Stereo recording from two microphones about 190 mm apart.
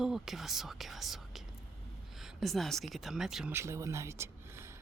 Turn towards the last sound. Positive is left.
turn(degrees=-15)  # may be behind; listen again after turning